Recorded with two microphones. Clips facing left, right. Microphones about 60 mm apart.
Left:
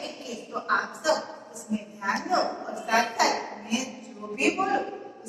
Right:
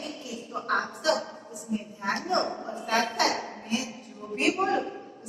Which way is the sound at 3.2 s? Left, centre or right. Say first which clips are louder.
Left 2 dB; left.